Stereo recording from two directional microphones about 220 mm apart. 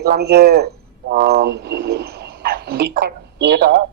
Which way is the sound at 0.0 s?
45° right (ahead or behind).